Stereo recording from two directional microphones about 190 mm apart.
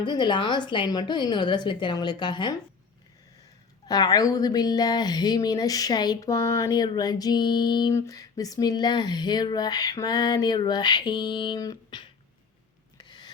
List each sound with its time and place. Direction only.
0.0 s a woman's voice: 25° left (ahead or behind)
3.8 s a woman's voice: 20° left (ahead or behind)
13.0 s rub: 20° left (ahead or behind)